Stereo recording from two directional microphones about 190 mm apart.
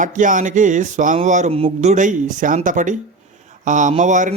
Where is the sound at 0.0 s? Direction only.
40° right (ahead or behind).